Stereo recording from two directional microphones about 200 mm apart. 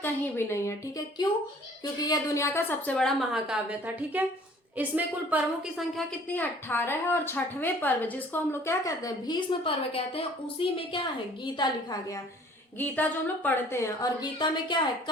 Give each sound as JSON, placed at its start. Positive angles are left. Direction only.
{"t": 0.0, "sound": "a woman's voice", "side_deg": 10}
{"t": 6.3, "sound": "a woman's voice", "side_deg": 10}
{"t": 12.8, "sound": "a woman's voice", "side_deg": 10}